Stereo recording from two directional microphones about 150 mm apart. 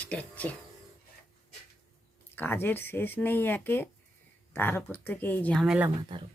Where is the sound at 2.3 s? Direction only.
15° left (ahead or behind).